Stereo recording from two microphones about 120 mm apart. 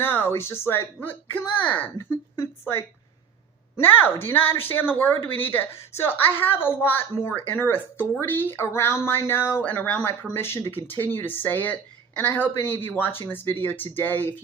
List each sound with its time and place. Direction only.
0.0 s speech: 20° left (ahead or behind)
3.8 s speech: 15° left (ahead or behind)